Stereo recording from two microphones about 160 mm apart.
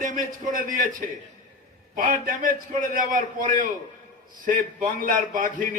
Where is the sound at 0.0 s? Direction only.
55° right (ahead or behind).